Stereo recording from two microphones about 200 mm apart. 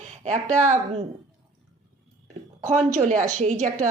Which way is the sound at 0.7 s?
30° right (ahead or behind).